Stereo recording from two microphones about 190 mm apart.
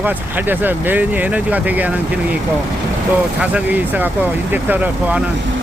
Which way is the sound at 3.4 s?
10° right (ahead or behind).